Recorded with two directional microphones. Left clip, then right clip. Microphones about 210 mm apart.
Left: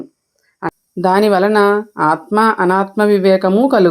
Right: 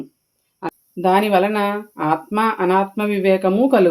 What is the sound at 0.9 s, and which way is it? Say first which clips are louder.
Speech: left 3 dB; 35° left (ahead or behind).